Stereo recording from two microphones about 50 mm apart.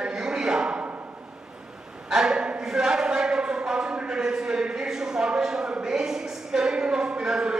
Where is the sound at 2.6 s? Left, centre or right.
Centre.